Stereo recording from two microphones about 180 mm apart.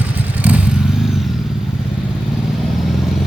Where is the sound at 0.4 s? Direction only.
10° right (ahead or behind).